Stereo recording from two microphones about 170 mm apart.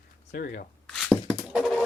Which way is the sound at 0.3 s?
60° left (ahead or behind).